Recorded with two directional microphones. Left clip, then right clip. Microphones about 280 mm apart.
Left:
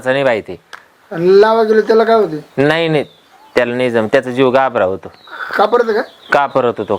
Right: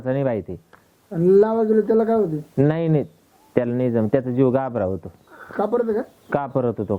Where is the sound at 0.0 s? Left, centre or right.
Centre.